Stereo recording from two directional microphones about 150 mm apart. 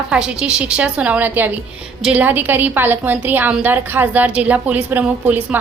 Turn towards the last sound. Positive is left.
turn(degrees=-10)  # may be behind; listen again after turning